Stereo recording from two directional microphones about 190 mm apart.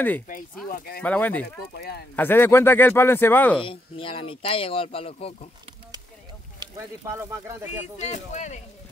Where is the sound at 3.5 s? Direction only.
25° left (ahead or behind).